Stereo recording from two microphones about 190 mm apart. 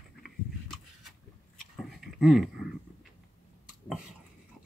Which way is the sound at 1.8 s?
Centre (ahead or behind).